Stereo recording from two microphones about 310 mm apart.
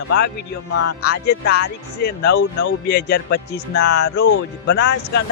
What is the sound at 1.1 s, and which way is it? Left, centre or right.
Speech, left.